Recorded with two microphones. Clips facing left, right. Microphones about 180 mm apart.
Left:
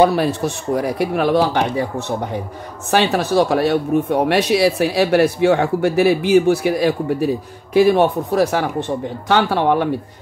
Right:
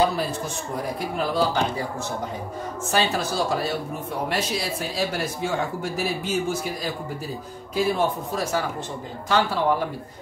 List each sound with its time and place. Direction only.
0.0 s speech: 70° left (ahead or behind)